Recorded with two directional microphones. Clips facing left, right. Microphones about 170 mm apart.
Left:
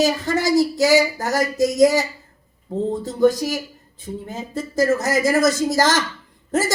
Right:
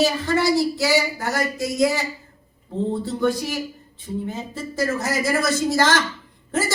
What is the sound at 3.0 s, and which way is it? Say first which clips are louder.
Speech: left 5 dB; 40° left (ahead or behind).